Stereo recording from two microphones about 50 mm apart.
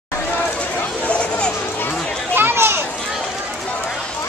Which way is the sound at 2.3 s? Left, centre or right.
Right.